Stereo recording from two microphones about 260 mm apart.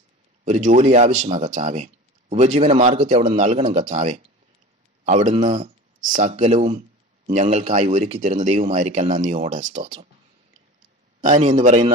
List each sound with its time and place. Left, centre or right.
0.5 s speech: right
11.1 s speech: right